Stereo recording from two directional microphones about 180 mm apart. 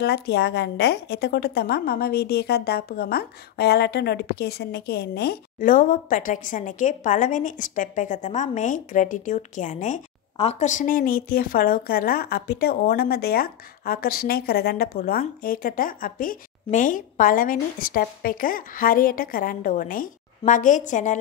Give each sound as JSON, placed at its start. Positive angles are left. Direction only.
{"t": 0.0, "sound": "a woman's voice", "side_deg": 65}